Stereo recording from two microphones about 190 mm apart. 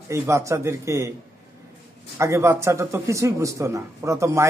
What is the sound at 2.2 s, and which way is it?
Speech, 15° right (ahead or behind).